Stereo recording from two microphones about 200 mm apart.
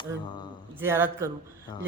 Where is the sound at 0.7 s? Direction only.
10° right (ahead or behind).